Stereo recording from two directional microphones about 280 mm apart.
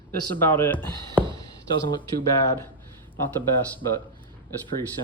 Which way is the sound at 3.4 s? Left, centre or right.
Centre.